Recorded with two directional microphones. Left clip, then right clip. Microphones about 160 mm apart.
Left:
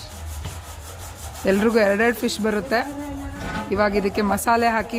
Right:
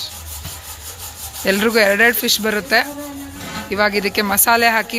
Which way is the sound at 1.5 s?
Centre (ahead or behind).